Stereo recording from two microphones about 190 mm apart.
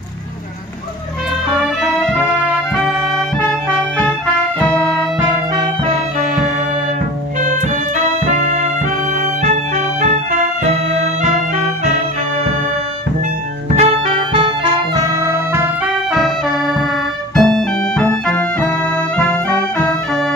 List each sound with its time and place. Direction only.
1.8 s music: centre (ahead or behind)
4.6 s music: 5° left (ahead or behind)
13.7 s music: 30° right (ahead or behind)
15.1 s music: 15° right (ahead or behind)
16.1 s music: centre (ahead or behind)
19.8 s music: 5° left (ahead or behind)